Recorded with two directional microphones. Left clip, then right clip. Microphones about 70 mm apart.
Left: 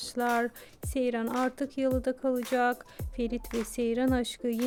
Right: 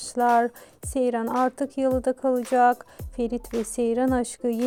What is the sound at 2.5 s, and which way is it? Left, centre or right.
Speech, right.